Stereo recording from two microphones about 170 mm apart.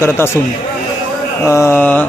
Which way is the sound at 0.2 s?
15° left (ahead or behind).